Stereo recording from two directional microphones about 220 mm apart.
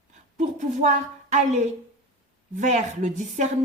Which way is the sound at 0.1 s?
35° right (ahead or behind).